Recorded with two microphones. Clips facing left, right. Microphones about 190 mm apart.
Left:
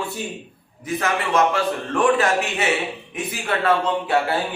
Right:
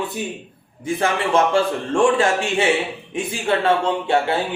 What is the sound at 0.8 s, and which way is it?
A man's voice, 30° right (ahead or behind).